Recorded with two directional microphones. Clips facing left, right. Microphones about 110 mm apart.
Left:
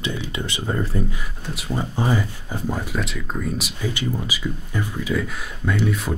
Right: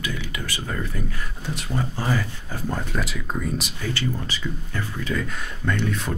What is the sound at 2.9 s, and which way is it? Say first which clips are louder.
Speech: left 1 dB; centre (ahead or behind).